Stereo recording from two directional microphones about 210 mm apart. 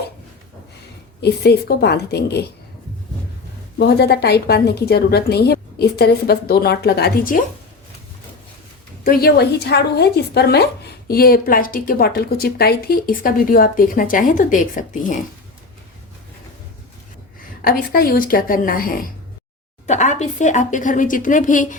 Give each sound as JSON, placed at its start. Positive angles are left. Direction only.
{"t": 1.2, "sound": "a woman's voice", "side_deg": 50}
{"t": 3.8, "sound": "a woman's voice", "side_deg": 50}
{"t": 9.0, "sound": "a woman's voice", "side_deg": 50}
{"t": 17.6, "sound": "a woman's voice", "side_deg": 45}